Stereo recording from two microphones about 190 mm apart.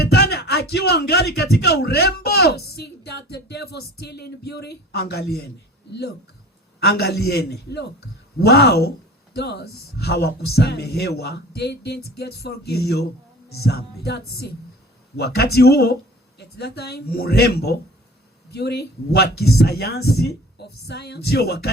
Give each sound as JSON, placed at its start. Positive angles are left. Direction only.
{"t": 0.0, "sound": "speech", "side_deg": 60}